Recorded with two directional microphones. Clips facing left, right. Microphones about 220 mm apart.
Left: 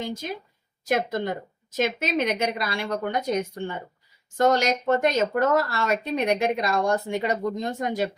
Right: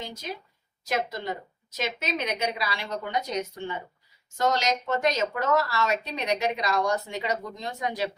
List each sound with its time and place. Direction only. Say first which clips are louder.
0.0 s a woman's voice: left 5 dB; 50° left (ahead or behind)